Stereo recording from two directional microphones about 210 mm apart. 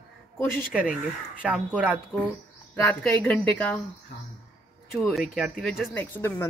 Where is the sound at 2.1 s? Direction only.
10° left (ahead or behind).